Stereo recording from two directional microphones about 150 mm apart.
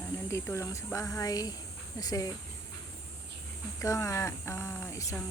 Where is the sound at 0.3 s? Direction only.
20° left (ahead or behind).